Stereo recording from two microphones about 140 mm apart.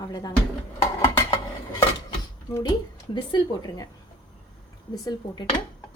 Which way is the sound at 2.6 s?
30° left (ahead or behind).